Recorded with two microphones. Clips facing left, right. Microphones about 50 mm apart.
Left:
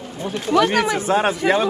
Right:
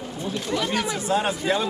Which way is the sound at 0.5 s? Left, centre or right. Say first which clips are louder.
Left 10 dB; left.